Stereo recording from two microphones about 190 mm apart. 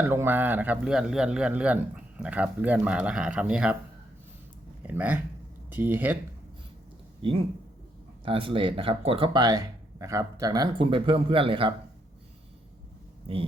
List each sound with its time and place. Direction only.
0.0 s speech: 10° right (ahead or behind)
4.8 s speech: 10° right (ahead or behind)
7.2 s speech: 30° right (ahead or behind)